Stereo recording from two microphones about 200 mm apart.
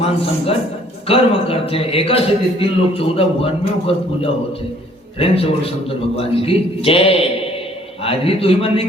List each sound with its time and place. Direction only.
1.0 s a man's voice: 30° left (ahead or behind)